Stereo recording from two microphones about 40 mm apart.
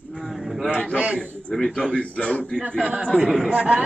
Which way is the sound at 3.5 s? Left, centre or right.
Right.